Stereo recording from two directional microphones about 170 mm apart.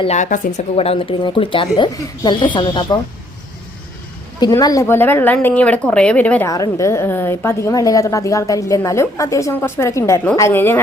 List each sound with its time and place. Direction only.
0.0 s speech: 45° left (ahead or behind)
0.8 s speech: 35° left (ahead or behind)
4.4 s a woman's voice: 25° left (ahead or behind)
6.5 s a woman's voice: 20° left (ahead or behind)